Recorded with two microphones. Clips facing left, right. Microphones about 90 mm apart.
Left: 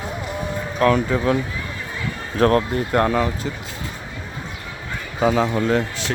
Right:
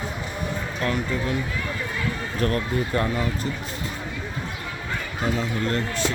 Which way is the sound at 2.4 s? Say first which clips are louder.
Left 8 dB; 80° left.